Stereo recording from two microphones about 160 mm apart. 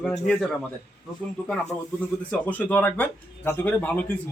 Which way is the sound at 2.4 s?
10° left (ahead or behind).